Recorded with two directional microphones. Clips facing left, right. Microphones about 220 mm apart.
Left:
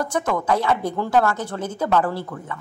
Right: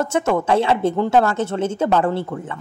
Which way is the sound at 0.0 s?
25° right (ahead or behind).